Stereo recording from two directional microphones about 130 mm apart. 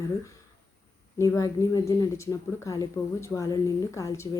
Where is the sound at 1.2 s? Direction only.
20° left (ahead or behind).